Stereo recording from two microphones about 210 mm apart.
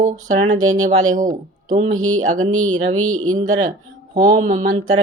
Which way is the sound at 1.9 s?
80° right.